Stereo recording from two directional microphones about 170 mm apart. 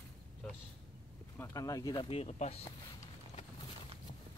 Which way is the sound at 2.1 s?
35° left (ahead or behind).